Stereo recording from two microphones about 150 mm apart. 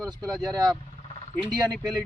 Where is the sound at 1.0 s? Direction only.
40° left (ahead or behind).